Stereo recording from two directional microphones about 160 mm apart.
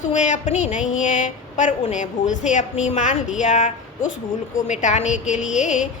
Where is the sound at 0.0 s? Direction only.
50° left (ahead or behind).